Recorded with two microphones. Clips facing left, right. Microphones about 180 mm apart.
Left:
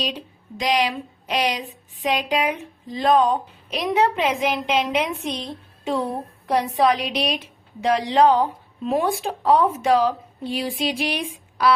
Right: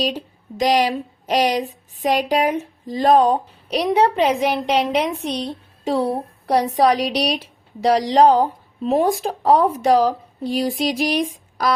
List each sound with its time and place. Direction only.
0.0 s a woman's voice: 45° right (ahead or behind)